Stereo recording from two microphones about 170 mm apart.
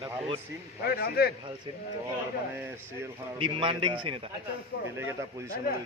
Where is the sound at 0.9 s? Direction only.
65° left (ahead or behind).